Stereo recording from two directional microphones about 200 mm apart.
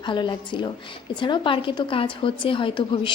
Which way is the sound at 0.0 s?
25° left (ahead or behind).